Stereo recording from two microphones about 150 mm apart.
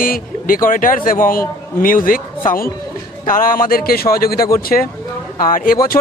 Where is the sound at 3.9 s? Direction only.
80° left.